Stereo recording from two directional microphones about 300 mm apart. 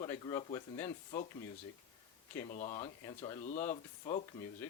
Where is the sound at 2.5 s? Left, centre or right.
Left.